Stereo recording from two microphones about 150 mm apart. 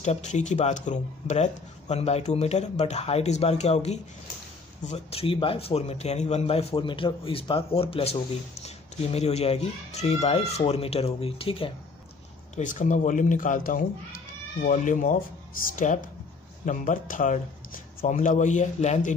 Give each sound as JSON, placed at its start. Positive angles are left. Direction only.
{"t": 0.0, "sound": "a man's voice", "side_deg": 50}
{"t": 12.5, "sound": "speech", "side_deg": 55}